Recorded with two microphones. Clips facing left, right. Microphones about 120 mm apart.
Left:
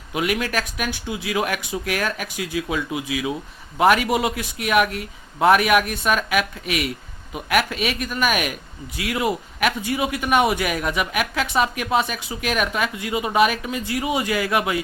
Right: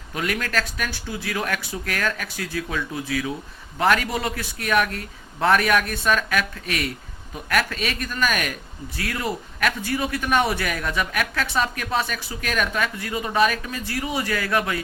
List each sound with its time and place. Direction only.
0.1 s a man's voice: 15° left (ahead or behind)